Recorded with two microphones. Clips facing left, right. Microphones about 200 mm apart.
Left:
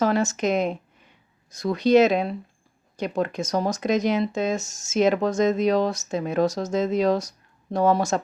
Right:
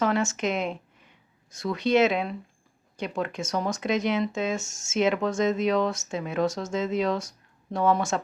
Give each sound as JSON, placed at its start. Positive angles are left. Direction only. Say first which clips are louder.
{"t": 0.0, "sound": "speech", "louder": "left 3 dB", "side_deg": 35}